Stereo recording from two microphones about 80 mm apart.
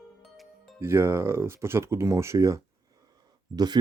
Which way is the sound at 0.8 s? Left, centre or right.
Right.